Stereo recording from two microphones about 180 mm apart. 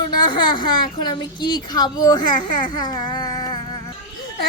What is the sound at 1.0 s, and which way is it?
A woman's voice, 25° left (ahead or behind).